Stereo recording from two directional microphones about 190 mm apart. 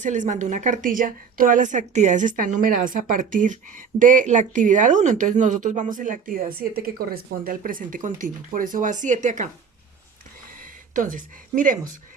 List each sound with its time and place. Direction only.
0.0 s a woman's voice: 40° right (ahead or behind)
10.6 s speech: 45° right (ahead or behind)